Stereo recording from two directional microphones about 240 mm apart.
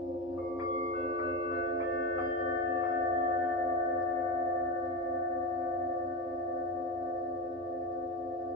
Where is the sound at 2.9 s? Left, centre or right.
Right.